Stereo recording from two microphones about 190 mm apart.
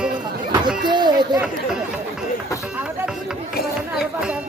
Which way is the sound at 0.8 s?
25° right (ahead or behind).